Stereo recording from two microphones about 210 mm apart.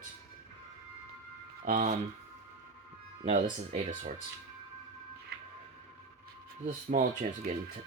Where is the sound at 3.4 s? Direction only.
25° right (ahead or behind).